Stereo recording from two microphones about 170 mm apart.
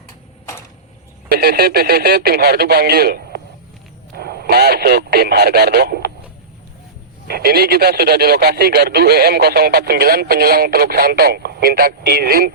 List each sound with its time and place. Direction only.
1.3 s speech: 65° right (ahead or behind)
7.3 s speech: 65° right (ahead or behind)